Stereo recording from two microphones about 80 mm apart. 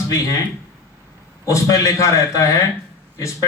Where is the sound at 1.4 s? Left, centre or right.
Left.